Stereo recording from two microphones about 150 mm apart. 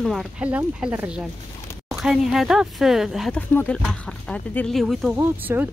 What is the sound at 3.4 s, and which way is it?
A woman's voice, 10° left (ahead or behind).